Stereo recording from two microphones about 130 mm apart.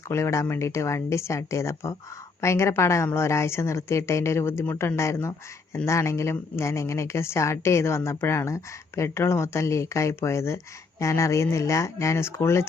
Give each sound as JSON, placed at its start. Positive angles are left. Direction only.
{"t": 0.1, "sound": "speech", "side_deg": 20}